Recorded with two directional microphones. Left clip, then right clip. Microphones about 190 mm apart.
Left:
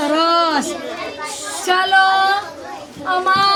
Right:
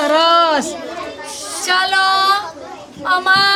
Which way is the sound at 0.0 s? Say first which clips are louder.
Right 3 dB; 55° right (ahead or behind).